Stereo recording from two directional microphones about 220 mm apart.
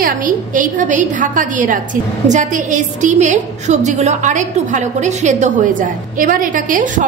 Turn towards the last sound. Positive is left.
turn(degrees=-35)  # may be behind; listen again after turning